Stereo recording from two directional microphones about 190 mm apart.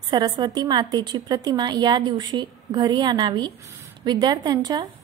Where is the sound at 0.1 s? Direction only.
20° right (ahead or behind).